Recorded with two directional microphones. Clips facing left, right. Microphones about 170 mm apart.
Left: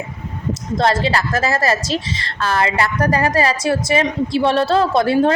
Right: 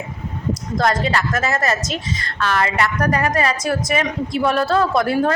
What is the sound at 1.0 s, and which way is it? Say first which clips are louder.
A woman's voice: left 2 dB; 30° left (ahead or behind).